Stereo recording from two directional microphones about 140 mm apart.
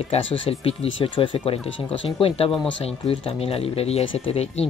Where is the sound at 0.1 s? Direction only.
45° left (ahead or behind).